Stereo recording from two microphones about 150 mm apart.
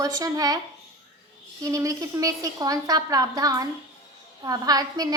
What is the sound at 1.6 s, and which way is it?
A woman's voice, 20° right (ahead or behind).